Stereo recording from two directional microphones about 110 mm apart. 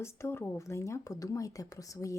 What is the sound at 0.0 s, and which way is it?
Speech, 25° left (ahead or behind).